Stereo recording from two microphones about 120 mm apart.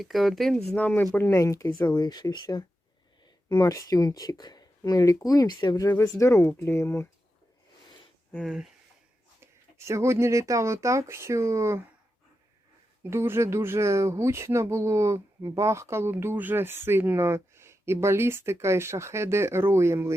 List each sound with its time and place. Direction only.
0.0 s speech: centre (ahead or behind); by 2.0 s 20° left (ahead or behind)
2.0 s speech: 35° left (ahead or behind)
5.9 s speech: 25° left (ahead or behind)
9.4 s speech: 20° right (ahead or behind)
13.0 s speech: 20° right (ahead or behind)